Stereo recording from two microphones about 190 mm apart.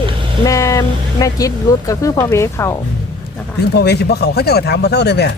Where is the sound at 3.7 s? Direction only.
60° left (ahead or behind).